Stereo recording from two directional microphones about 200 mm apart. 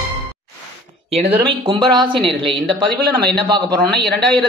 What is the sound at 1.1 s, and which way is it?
A woman's voice, 25° right (ahead or behind).